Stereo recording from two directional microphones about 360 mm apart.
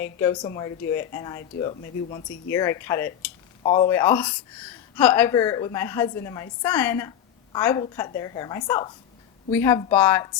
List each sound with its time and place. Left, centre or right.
0.0 s a woman's voice: centre